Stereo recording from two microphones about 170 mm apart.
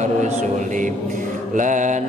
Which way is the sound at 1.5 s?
50° right (ahead or behind).